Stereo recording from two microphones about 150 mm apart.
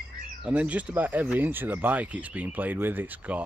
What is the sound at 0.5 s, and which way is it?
Speech, 10° right (ahead or behind).